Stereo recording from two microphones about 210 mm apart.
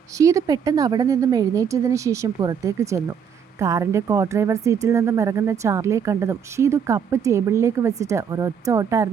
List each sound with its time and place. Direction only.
0.2 s a woman's voice: 15° right (ahead or behind)